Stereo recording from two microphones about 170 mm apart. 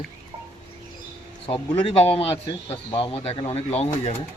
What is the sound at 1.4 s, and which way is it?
Speech, 30° left (ahead or behind).